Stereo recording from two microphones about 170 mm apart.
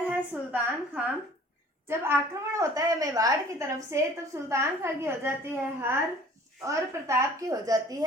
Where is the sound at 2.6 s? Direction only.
20° right (ahead or behind).